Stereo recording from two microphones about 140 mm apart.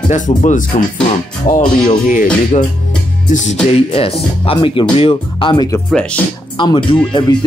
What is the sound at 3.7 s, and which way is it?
Speech, 45° left (ahead or behind).